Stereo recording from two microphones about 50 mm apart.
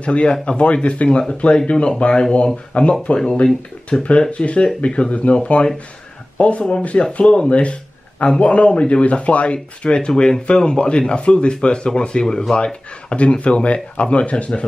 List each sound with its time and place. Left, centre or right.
0.0 s speech: left